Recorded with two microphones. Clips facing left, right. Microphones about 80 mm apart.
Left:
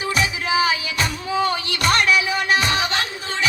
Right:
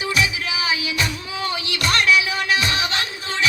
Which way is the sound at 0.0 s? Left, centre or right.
Left.